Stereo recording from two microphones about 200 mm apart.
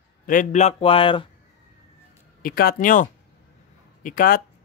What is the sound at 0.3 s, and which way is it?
Speech, 40° left (ahead or behind).